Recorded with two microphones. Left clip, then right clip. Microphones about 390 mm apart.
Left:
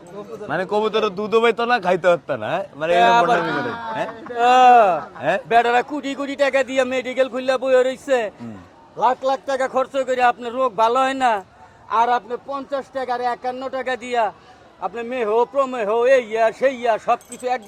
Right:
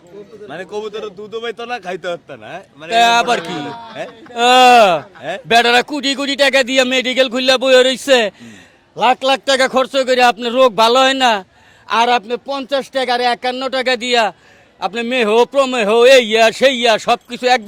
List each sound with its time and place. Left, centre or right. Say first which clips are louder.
0.5 s speech: left 5 dB; centre
4.4 s speech: right 4 dB; right
9.0 s a man's voice: right 5 dB; right
11.9 s a man's voice: right 4 dB; right